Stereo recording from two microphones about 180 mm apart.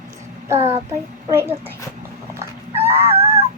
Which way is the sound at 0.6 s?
35° right (ahead or behind).